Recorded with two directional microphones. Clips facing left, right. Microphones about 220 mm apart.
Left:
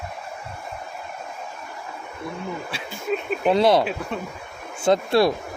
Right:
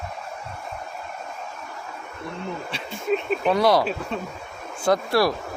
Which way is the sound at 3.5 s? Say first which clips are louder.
Left 2 dB; 25° left (ahead or behind).